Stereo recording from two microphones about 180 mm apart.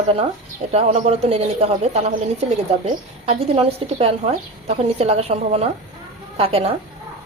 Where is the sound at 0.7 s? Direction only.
35° right (ahead or behind).